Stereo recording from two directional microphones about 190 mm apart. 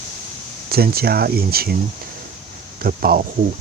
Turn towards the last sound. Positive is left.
turn(degrees=-50)  # may be behind; listen again after turning